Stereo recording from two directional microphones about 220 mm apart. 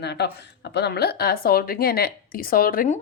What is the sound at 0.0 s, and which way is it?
A woman's voice, 50° left (ahead or behind).